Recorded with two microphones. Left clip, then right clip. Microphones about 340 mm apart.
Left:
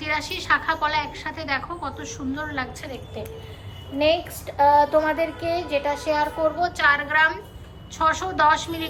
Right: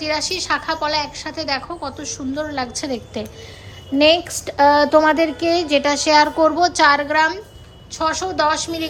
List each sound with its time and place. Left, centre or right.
0.0 s a woman's voice: centre
3.9 s a sound: right; by 7.3 s centre
7.9 s a woman's voice: centre